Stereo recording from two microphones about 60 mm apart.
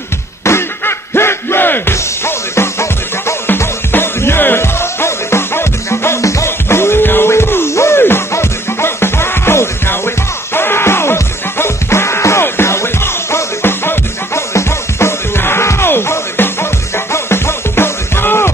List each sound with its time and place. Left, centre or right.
0.5 s music: left
3.4 s music: left
6.2 s music: left
6.7 s music: left